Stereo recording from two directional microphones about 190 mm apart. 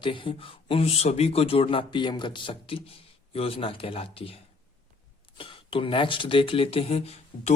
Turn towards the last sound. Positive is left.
turn(degrees=30)  # may be behind; listen again after turning